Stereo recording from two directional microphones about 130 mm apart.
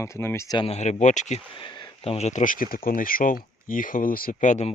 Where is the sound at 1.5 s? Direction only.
40° left (ahead or behind).